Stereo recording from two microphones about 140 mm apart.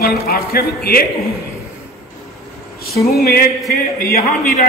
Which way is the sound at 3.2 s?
90° left.